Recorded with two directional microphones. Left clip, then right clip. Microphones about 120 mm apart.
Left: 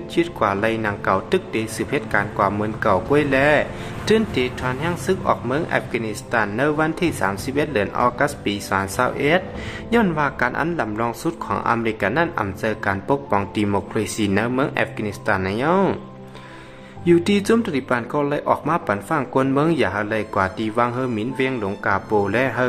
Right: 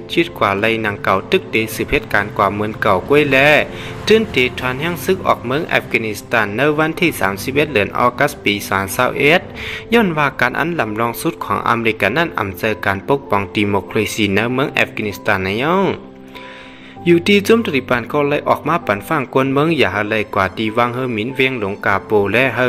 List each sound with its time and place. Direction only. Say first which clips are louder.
0.1 s speech: right 5 dB; 15° right (ahead or behind)
17.0 s speech: right 5 dB; 15° right (ahead or behind)